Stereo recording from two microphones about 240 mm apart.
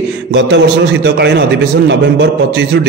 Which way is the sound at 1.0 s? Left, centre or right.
Right.